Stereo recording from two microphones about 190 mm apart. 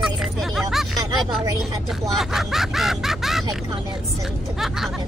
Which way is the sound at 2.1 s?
Centre (ahead or behind).